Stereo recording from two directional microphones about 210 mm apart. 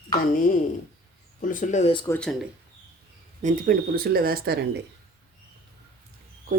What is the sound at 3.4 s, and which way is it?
Speech, 40° right (ahead or behind).